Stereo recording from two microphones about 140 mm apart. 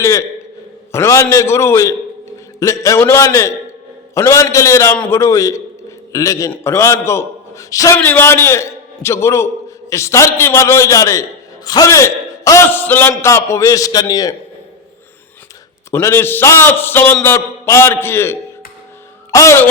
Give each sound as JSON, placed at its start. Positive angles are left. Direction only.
{"t": 0.0, "sound": "a man's voice", "side_deg": 20}
{"t": 15.9, "sound": "a man's voice", "side_deg": 20}